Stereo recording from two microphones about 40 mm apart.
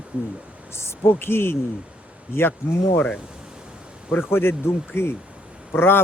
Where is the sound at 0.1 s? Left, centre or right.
Right.